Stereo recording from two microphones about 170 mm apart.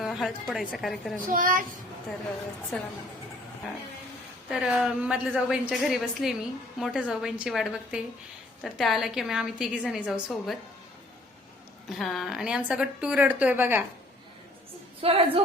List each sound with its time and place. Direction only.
0.0 s a woman's voice: centre (ahead or behind)
1.3 s a child's voice: 55° right (ahead or behind)
2.7 s a woman's voice: 5° left (ahead or behind)
4.4 s a woman's voice: 5° right (ahead or behind)
11.9 s a woman's voice: centre (ahead or behind)
15.0 s a woman's voice: 35° right (ahead or behind)